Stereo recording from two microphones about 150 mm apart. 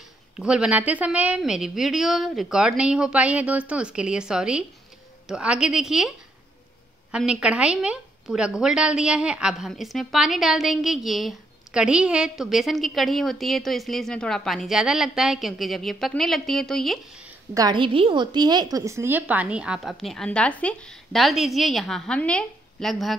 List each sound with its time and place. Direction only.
0.4 s a woman's voice: 5° right (ahead or behind)
17.6 s a woman's voice: 30° right (ahead or behind); by 23.1 s centre (ahead or behind)